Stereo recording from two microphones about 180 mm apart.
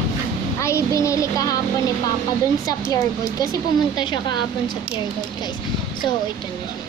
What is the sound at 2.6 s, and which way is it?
A woman's voice, 20° left (ahead or behind).